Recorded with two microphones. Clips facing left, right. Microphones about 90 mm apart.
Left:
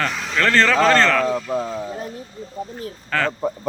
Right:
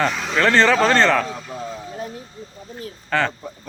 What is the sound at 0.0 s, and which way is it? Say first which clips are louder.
Speech: right 2 dB; 5° right (ahead or behind).